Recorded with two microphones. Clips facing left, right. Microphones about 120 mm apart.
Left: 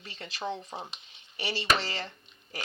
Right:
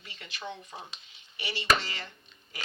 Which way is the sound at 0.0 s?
35° left (ahead or behind).